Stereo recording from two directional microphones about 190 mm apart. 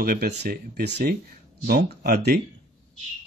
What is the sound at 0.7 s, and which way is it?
Speech, 60° right (ahead or behind).